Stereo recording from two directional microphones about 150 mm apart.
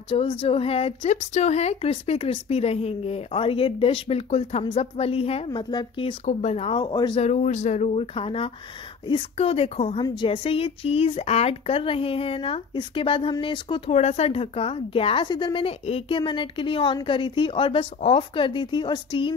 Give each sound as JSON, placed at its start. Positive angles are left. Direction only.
{"t": 0.1, "sound": "a woman's voice", "side_deg": 35}
{"t": 6.2, "sound": "a woman's voice", "side_deg": 45}
{"t": 7.2, "sound": "a woman's voice", "side_deg": 50}
{"t": 13.9, "sound": "a woman's voice", "side_deg": 45}